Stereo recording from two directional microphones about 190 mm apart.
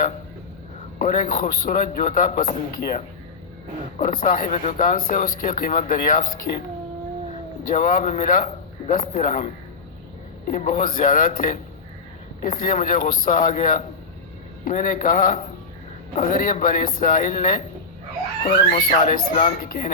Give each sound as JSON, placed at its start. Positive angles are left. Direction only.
{"t": 0.9, "sound": "a man's voice", "side_deg": 45}
{"t": 3.9, "sound": "a man's voice", "side_deg": 45}
{"t": 7.7, "sound": "a man's voice", "side_deg": 45}
{"t": 18.4, "sound": "a man's voice", "side_deg": 35}